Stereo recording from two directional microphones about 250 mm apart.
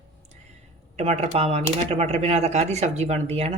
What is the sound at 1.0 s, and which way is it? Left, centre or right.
Speech, right.